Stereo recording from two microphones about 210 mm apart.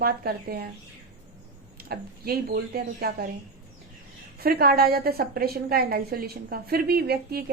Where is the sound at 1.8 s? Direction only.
45° right (ahead or behind).